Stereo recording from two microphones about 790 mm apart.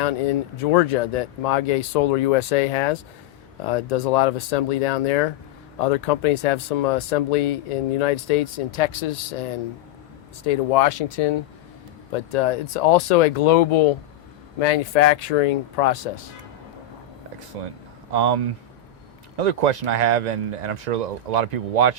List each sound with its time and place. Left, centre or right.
0.5 s speech: left
17.5 s speech: right